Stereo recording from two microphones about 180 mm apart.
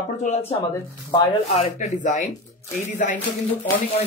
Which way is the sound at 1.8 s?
45° left (ahead or behind).